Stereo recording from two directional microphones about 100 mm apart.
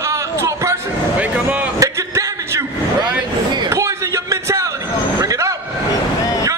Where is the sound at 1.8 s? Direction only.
30° right (ahead or behind).